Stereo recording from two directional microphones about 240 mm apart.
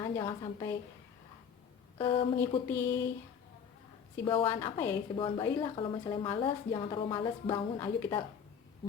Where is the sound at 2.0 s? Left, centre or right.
Centre.